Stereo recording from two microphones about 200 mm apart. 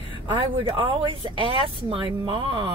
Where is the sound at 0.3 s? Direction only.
25° right (ahead or behind).